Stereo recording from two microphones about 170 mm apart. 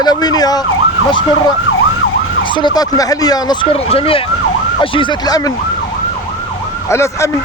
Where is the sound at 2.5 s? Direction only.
25° left (ahead or behind).